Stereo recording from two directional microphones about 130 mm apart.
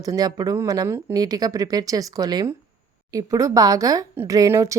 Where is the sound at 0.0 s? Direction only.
25° right (ahead or behind).